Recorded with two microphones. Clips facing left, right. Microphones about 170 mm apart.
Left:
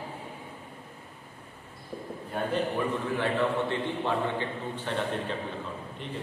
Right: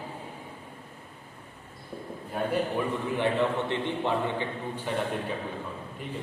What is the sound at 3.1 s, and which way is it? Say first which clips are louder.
A man's voice: right 2 dB; 20° right (ahead or behind).